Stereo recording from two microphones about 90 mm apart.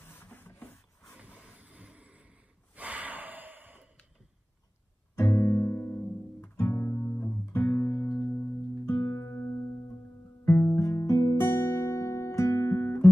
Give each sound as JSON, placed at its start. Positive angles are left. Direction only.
{"t": 0.0, "sound": "rub", "side_deg": 25}
{"t": 1.6, "sound": "snort", "side_deg": -15}
{"t": 5.1, "sound": "music", "side_deg": 30}
{"t": 10.4, "sound": "music", "side_deg": 25}
{"t": 10.8, "sound": "guitar", "side_deg": 35}